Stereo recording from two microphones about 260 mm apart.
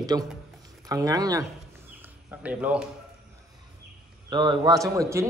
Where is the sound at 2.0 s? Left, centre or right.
Centre.